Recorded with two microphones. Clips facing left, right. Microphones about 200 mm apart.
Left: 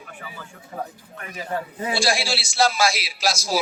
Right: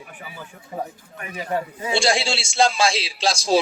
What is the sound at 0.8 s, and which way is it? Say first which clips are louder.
A man's voice: right 2 dB; 15° right (ahead or behind).